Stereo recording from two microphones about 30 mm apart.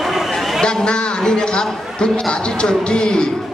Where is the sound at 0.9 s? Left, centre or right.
Left.